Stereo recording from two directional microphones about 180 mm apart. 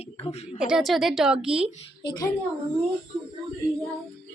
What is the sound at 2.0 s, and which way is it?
Speech, 20° left (ahead or behind).